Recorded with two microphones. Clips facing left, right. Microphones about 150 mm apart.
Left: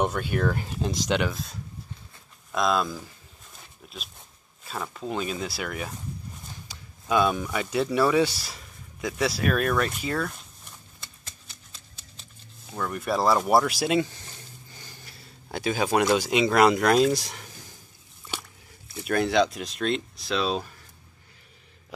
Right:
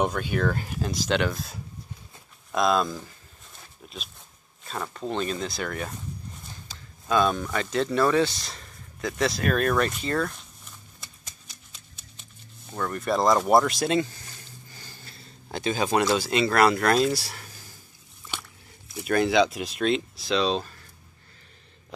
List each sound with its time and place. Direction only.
0.1 s speech: 10° left (ahead or behind)
1.0 s speech: 5° left (ahead or behind)
12.6 s speech: 5° left (ahead or behind)
19.0 s speech: centre (ahead or behind)